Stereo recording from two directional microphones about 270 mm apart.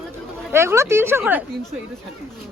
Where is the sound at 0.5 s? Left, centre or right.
Centre.